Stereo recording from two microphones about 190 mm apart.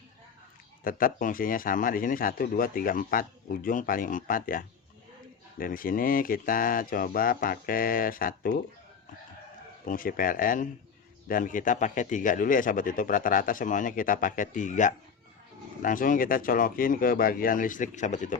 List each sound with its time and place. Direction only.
0.9 s a man's voice: 45° left (ahead or behind)
9.8 s a man's voice: 45° left (ahead or behind)